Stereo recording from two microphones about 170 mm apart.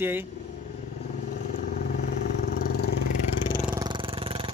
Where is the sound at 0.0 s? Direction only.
10° right (ahead or behind).